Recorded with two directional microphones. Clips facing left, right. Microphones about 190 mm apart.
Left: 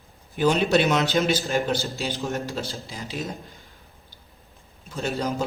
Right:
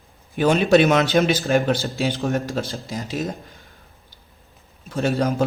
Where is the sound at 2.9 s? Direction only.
45° right (ahead or behind).